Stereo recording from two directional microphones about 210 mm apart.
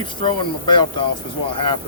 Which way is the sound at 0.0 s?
25° left (ahead or behind).